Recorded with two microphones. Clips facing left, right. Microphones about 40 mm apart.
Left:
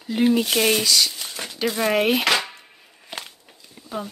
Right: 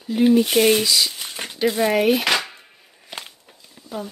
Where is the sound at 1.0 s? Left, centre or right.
Centre.